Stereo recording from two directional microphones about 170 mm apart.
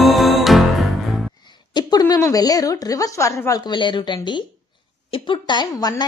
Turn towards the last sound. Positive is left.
turn(degrees=25)  # may be behind; listen again after turning